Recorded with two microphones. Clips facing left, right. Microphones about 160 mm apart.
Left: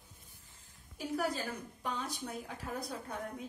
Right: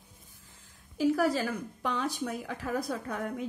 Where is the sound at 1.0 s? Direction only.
90° right.